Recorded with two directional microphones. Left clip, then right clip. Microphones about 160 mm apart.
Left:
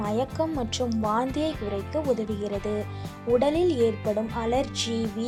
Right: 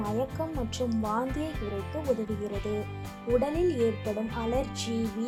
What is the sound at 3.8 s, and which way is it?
Speech, 40° left (ahead or behind).